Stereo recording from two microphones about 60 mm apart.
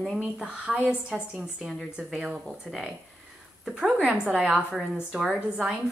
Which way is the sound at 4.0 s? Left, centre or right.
Centre.